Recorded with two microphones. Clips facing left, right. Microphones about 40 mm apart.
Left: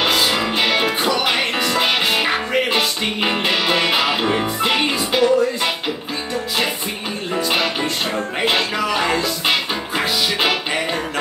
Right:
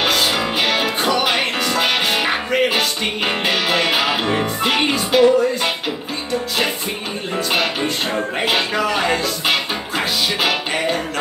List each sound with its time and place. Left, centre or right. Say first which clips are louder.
0.0 s music: even; centre
8.5 s music: right 1 dB; centre